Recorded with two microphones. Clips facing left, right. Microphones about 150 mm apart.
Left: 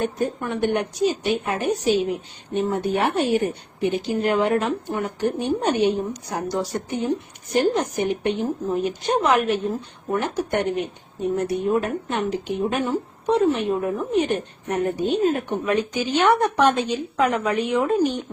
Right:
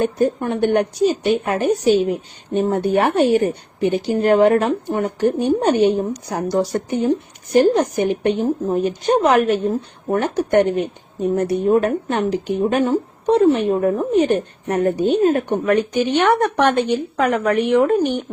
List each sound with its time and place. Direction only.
0.3 s a woman's voice: 35° right (ahead or behind); by 18.3 s 60° right (ahead or behind)